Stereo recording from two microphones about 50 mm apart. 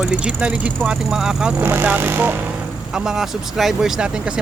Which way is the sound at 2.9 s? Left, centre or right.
Centre.